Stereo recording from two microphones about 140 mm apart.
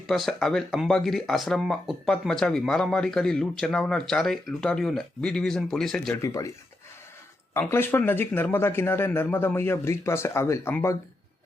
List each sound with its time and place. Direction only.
0.1 s speech: 5° left (ahead or behind)
6.2 s speech: 25° left (ahead or behind)
7.5 s speech: 15° left (ahead or behind)